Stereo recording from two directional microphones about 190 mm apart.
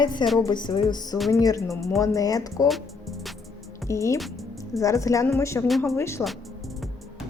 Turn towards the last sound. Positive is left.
turn(degrees=15)  # may be behind; listen again after turning